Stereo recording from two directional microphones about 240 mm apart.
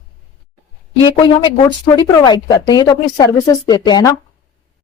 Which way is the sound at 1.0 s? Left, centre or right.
Centre.